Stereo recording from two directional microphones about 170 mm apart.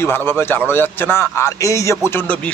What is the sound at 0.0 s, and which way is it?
A man's voice, 15° left (ahead or behind).